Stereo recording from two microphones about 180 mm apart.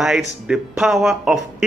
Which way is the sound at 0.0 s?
Centre (ahead or behind).